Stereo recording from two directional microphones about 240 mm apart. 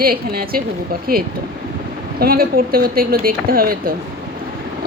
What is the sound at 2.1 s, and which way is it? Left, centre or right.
Speech, right.